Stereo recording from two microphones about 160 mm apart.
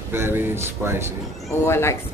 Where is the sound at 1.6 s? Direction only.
15° left (ahead or behind).